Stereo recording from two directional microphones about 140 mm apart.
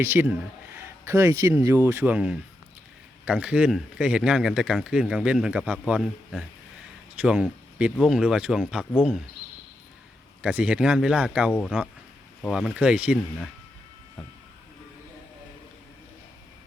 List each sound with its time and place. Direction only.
0.0 s speech: 15° right (ahead or behind); by 9.2 s 5° left (ahead or behind)
10.4 s speech: 5° right (ahead or behind)